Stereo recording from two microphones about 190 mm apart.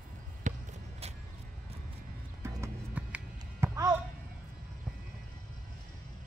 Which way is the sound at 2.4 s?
15° right (ahead or behind).